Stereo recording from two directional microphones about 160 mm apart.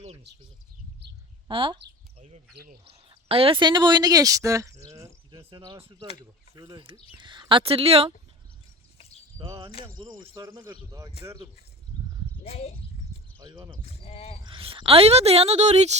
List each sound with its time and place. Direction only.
1.5 s a sound: 30° right (ahead or behind)
2.2 s speech: 45° right (ahead or behind); by 5.1 s 20° right (ahead or behind)
5.5 s speech: 35° right (ahead or behind)
6.5 s speech: 20° right (ahead or behind); by 8.1 s 35° right (ahead or behind)
9.0 s a sound: 40° left (ahead or behind)
10.0 s speech: 30° right (ahead or behind)
12.4 s speech: 40° left (ahead or behind)
13.4 s speech: 25° right (ahead or behind)
13.8 s speech: 40° left (ahead or behind)
14.4 s speech: 35° right (ahead or behind)